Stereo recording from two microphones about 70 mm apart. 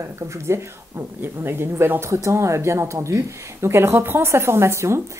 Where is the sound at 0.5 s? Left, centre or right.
Right.